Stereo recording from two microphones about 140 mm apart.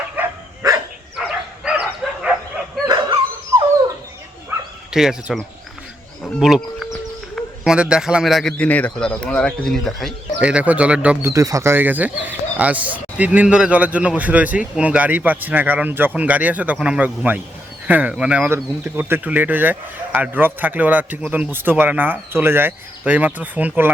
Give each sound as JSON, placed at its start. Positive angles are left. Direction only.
{"t": 0.2, "sound": "dog", "side_deg": -10}
{"t": 0.6, "sound": "dog", "side_deg": -25}
{"t": 1.1, "sound": "dog", "side_deg": -5}
{"t": 2.8, "sound": "bow-wow", "side_deg": -30}
{"t": 4.9, "sound": "a man's voice", "side_deg": -5}
{"t": 10.4, "sound": "speech", "side_deg": -10}